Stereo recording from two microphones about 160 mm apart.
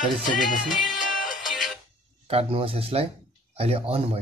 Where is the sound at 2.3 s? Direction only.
40° right (ahead or behind).